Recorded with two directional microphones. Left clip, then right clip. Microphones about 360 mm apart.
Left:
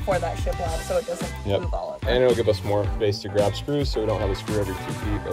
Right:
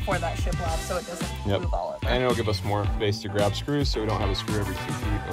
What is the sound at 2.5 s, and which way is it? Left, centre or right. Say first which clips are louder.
Speech: left 7 dB; right.